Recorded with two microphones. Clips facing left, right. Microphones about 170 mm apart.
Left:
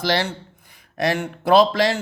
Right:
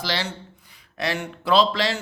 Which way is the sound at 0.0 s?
55° left (ahead or behind).